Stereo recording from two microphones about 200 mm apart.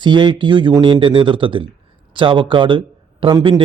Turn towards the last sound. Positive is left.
turn(degrees=-25)  # may be behind; listen again after turning